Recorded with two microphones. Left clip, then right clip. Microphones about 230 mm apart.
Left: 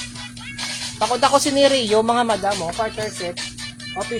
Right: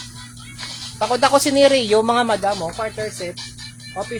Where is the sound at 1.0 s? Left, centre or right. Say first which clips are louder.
Right 1 dB; right.